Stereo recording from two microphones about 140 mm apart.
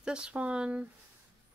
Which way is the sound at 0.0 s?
5° right (ahead or behind).